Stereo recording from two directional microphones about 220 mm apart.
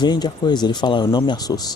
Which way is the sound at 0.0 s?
20° left (ahead or behind).